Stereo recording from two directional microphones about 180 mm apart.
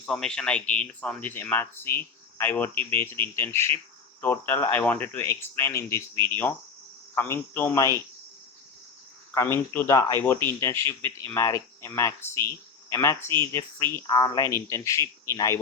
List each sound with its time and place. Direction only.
0.0 s speech: 5° left (ahead or behind)
7.2 s speech: 10° left (ahead or behind)
9.7 s speech: 15° left (ahead or behind)